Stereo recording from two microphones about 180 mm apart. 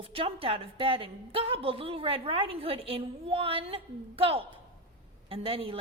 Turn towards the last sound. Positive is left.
turn(degrees=-30)  # may be behind; listen again after turning